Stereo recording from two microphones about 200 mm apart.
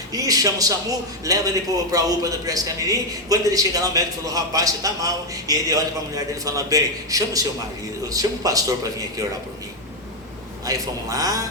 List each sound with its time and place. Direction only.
0.1 s a man's voice: 15° right (ahead or behind)
10.7 s a man's voice: 15° right (ahead or behind)